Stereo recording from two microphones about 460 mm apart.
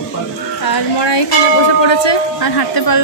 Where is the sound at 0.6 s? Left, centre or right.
Left.